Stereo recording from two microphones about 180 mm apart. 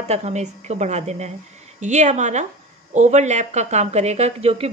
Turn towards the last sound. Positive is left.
turn(degrees=-35)  # may be behind; listen again after turning